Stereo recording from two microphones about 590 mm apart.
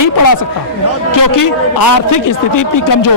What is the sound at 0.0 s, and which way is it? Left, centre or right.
A man's voice, left.